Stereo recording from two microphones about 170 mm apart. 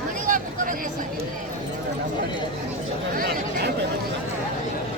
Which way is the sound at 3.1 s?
65° right (ahead or behind).